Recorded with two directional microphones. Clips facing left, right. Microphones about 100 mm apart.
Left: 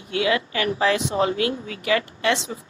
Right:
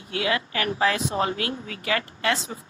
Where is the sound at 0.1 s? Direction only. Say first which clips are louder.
Left 4 dB; 35° right (ahead or behind).